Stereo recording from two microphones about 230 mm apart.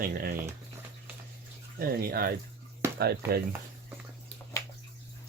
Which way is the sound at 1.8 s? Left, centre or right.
Right.